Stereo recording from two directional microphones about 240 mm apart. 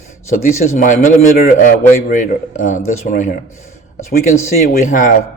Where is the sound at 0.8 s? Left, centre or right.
Left.